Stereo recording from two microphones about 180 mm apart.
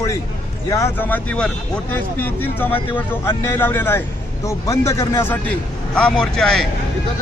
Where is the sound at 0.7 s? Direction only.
15° left (ahead or behind).